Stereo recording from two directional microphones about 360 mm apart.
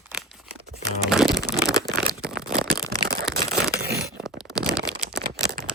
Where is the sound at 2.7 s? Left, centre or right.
Centre.